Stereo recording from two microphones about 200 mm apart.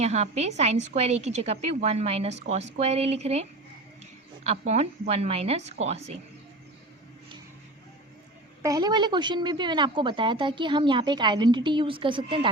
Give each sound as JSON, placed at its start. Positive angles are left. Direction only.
{"t": 0.0, "sound": "a woman's voice", "side_deg": -35}
{"t": 4.4, "sound": "a woman's voice", "side_deg": -35}
{"t": 8.6, "sound": "a woman's voice", "side_deg": -20}